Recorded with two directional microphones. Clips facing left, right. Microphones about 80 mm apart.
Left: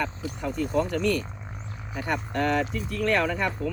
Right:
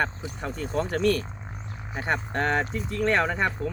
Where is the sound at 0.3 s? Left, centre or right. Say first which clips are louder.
Left 3 dB; right.